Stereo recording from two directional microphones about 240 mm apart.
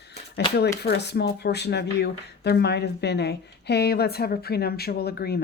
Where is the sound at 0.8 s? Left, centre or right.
Left.